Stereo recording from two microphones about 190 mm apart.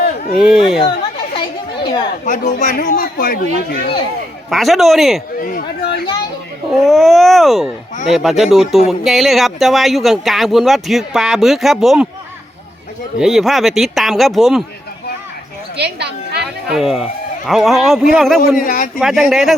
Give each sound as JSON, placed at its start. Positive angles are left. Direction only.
{"t": 0.3, "sound": "speech", "side_deg": -5}
{"t": 1.1, "sound": "chatter", "side_deg": 25}
{"t": 2.2, "sound": "speech", "side_deg": 40}
{"t": 4.4, "sound": "speech", "side_deg": 0}
{"t": 5.4, "sound": "a sound", "side_deg": 50}
{"t": 6.7, "sound": "speech", "side_deg": 0}
{"t": 13.1, "sound": "speech", "side_deg": 0}
{"t": 15.8, "sound": "a woman's voice", "side_deg": -60}
{"t": 16.6, "sound": "speech", "side_deg": 0}
{"t": 18.6, "sound": "speech", "side_deg": 45}
{"t": 18.9, "sound": "speech", "side_deg": 0}